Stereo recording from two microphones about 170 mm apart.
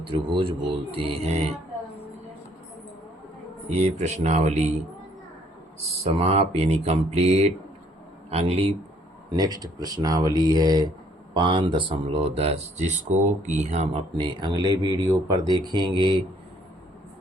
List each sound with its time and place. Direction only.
0.1 s speech: 30° right (ahead or behind)
3.8 s speech: 40° right (ahead or behind)
6.1 s speech: 35° right (ahead or behind)
9.3 s speech: 20° right (ahead or behind); by 14.0 s 40° right (ahead or behind)
14.2 s speech: 25° right (ahead or behind)